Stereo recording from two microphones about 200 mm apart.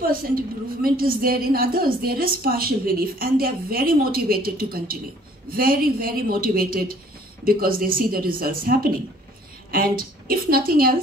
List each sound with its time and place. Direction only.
0.8 s a woman's voice: 45° right (ahead or behind)